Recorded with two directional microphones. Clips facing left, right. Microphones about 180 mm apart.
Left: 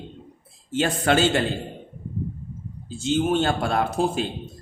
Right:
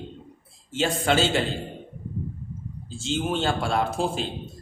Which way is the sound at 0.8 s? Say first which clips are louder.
Left 1 dB; 55° left (ahead or behind).